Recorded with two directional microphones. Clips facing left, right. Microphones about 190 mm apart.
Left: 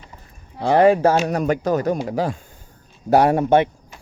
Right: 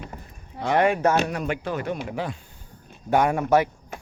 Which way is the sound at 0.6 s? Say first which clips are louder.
Left 6 dB; 35° left (ahead or behind).